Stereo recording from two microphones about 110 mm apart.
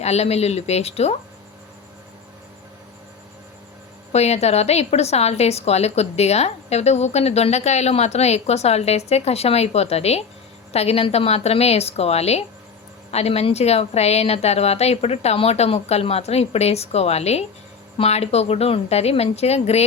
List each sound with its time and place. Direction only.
0.0 s a woman's voice: 80° left
4.1 s a woman's voice: 80° left